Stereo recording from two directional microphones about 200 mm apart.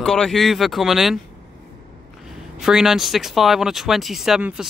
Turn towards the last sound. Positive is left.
turn(degrees=-5)  # may be behind; listen again after turning